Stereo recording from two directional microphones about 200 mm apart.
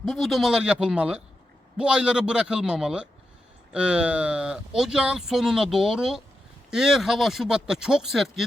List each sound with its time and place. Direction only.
0.0 s speech: centre (ahead or behind)